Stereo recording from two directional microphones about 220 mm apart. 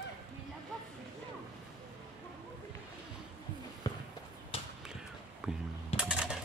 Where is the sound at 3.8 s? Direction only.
15° left (ahead or behind).